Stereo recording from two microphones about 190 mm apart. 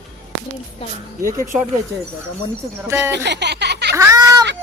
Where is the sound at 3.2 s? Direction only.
65° right (ahead or behind).